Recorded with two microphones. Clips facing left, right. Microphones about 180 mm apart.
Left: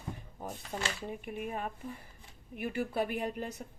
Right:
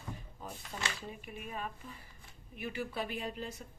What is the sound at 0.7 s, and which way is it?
Speech, 40° left (ahead or behind).